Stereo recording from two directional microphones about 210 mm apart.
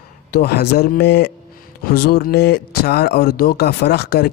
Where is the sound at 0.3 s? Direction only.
50° left (ahead or behind).